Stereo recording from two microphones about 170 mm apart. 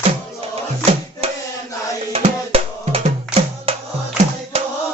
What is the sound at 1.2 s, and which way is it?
Music, 35° right (ahead or behind).